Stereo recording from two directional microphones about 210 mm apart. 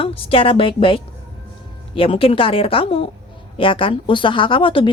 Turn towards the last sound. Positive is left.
turn(degrees=25)  # may be behind; listen again after turning